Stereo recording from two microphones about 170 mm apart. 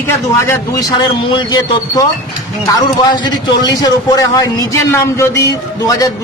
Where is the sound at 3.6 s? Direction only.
25° left (ahead or behind).